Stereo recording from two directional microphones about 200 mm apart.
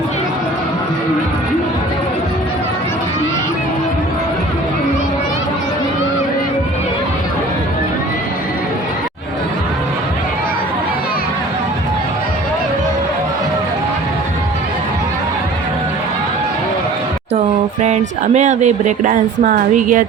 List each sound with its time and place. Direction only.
17.8 s speech: 35° right (ahead or behind)